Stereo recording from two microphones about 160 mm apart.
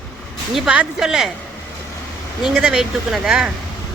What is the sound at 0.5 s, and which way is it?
Speech, 5° right (ahead or behind).